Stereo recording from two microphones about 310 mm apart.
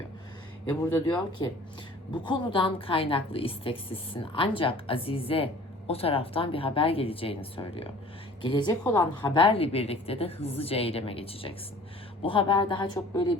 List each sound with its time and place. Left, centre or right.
0.7 s a woman's voice: centre